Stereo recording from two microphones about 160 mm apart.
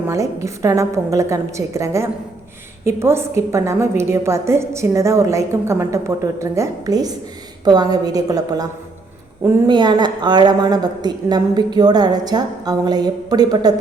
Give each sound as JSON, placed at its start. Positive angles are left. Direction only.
{"t": 0.4, "sound": "a woman's voice", "side_deg": -20}